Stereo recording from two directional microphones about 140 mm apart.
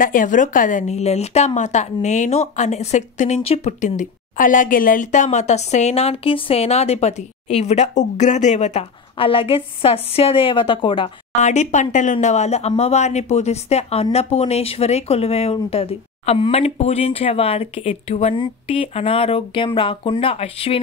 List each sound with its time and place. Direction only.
0.0 s a woman's voice: 75° left (ahead or behind); by 8.8 s 55° left (ahead or behind)
9.2 s speech: 40° left (ahead or behind)
11.4 s speech: 60° left (ahead or behind)
18.3 s speech: 40° left (ahead or behind)